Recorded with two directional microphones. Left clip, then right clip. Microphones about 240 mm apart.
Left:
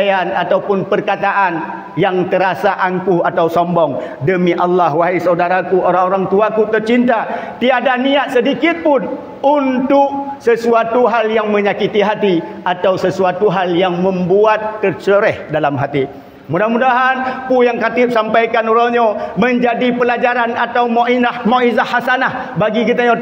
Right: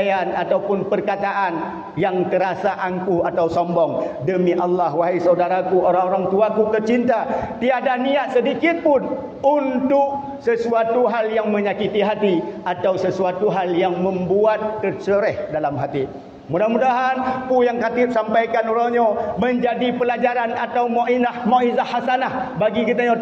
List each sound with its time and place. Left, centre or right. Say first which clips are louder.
0.0 s a man's voice: left 5 dB; left
16.5 s a man's voice: left 5 dB; left